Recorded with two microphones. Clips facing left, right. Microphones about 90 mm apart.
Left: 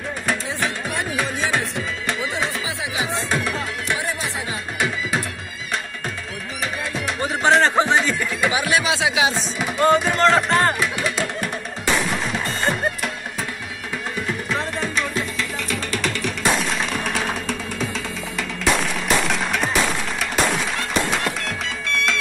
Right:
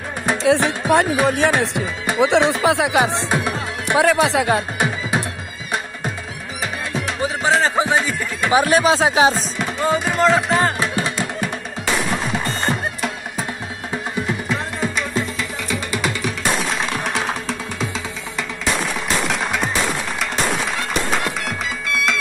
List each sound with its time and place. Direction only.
0.4 s music: 70° right (ahead or behind)
1.2 s speech: 65° right (ahead or behind)
3.1 s speech: 20° right (ahead or behind)
3.9 s speech: 85° right
4.7 s music: 20° right (ahead or behind)
7.2 s speech: centre (ahead or behind)
8.5 s speech: 40° right (ahead or behind)
9.3 s music: centre (ahead or behind)
10.8 s music: 30° right (ahead or behind)
12.1 s music: centre (ahead or behind)
14.5 s music: 5° right (ahead or behind)
19.2 s music: centre (ahead or behind)
21.1 s music: centre (ahead or behind)